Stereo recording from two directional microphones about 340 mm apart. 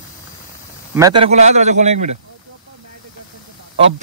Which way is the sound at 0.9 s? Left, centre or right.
Centre.